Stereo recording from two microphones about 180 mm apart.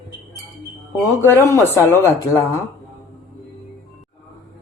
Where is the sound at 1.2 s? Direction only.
15° left (ahead or behind).